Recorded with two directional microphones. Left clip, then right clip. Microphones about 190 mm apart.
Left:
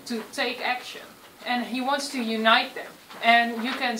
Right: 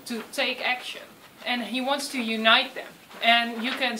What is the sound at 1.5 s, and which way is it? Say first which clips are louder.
Speech: left 1 dB; 40° right (ahead or behind).